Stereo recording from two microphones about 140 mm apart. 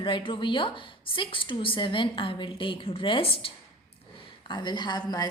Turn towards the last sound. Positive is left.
turn(degrees=30)  # may be behind; listen again after turning